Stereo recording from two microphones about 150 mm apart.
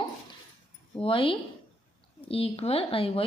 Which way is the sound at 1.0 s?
35° left (ahead or behind).